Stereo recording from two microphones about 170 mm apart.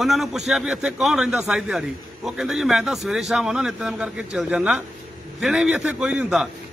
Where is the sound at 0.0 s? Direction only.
Centre (ahead or behind).